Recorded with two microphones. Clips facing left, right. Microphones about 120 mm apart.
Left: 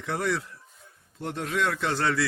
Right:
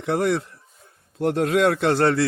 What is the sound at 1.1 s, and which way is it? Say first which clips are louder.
A man's voice: right 9 dB; 70° right (ahead or behind).